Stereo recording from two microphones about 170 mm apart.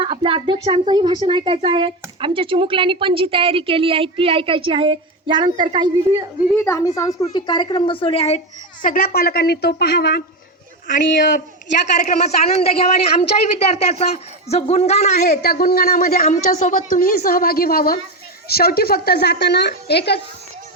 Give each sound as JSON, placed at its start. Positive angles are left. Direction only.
{"t": 0.0, "sound": "a woman's voice", "side_deg": -30}
{"t": 6.5, "sound": "speech", "side_deg": 15}
{"t": 8.8, "sound": "a woman's voice", "side_deg": 55}
{"t": 10.8, "sound": "a man's voice", "side_deg": 50}
{"t": 12.0, "sound": "speech", "side_deg": 40}
{"t": 15.3, "sound": "a woman's voice", "side_deg": 65}
{"t": 16.2, "sound": "a woman's voice", "side_deg": 50}